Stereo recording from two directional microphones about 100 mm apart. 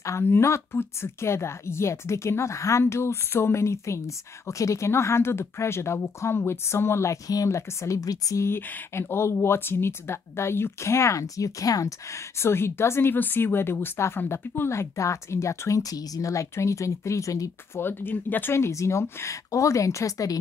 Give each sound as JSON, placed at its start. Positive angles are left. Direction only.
{"t": 0.0, "sound": "a woman's voice", "side_deg": 25}
{"t": 17.8, "sound": "a woman's voice", "side_deg": 20}